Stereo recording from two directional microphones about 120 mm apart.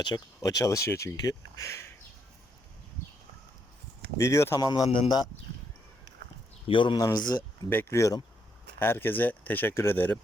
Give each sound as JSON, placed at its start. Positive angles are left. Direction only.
{"t": 0.0, "sound": "speech", "side_deg": 35}
{"t": 4.2, "sound": "speech", "side_deg": 20}
{"t": 4.6, "sound": "speech", "side_deg": 35}
{"t": 6.7, "sound": "speech", "side_deg": 45}
{"t": 7.7, "sound": "speech", "side_deg": 20}